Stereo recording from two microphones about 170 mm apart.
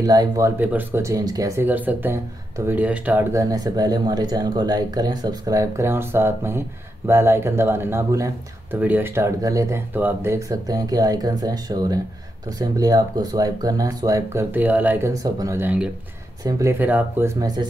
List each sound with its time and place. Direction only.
0.0 s speech: 20° right (ahead or behind)
0.6 s speech: 10° right (ahead or behind)